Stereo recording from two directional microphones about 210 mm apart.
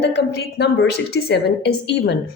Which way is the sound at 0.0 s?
55° left (ahead or behind).